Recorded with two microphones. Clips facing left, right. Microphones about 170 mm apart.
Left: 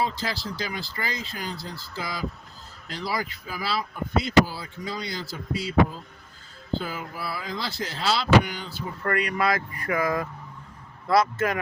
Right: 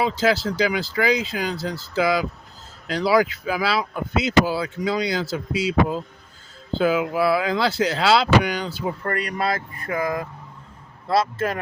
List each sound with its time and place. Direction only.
0.0 s speech: 90° right
9.0 s speech: 35° right (ahead or behind)